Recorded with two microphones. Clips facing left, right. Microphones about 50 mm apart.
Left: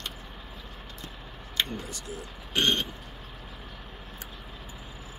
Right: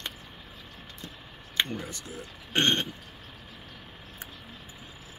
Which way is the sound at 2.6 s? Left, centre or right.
Right.